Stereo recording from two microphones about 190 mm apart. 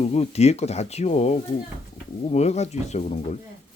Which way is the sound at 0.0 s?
35° left (ahead or behind).